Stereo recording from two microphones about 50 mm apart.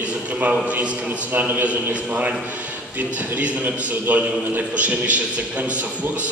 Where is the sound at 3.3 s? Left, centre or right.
Right.